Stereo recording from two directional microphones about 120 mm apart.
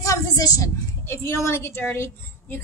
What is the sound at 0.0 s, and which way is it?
A woman's voice, 25° left (ahead or behind).